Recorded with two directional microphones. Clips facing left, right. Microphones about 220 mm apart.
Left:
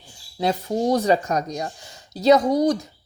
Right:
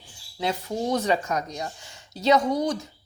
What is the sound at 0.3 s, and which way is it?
Speech, 35° left (ahead or behind).